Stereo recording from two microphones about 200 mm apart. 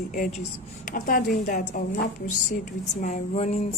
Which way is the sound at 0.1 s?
40° left (ahead or behind).